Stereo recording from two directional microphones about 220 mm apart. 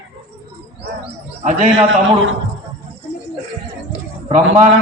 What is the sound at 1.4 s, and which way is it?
Speech, 35° right (ahead or behind).